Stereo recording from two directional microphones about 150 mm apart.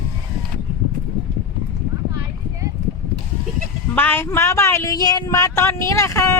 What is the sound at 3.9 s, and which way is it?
Speech, 15° left (ahead or behind).